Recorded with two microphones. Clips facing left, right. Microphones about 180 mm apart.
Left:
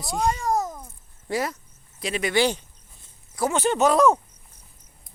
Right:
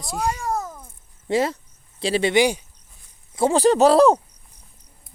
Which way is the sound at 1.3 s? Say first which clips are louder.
Right 6 dB; 25° right (ahead or behind).